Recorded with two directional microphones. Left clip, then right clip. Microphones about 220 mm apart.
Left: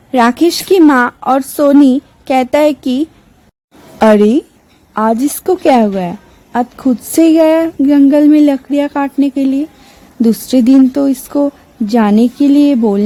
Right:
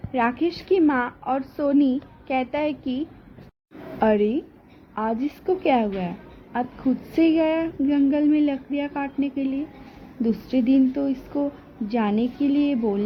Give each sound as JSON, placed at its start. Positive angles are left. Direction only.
{"t": 0.1, "sound": "a woman's voice", "side_deg": 60}